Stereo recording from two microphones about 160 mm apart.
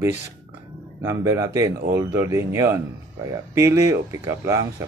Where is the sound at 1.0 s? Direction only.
20° right (ahead or behind).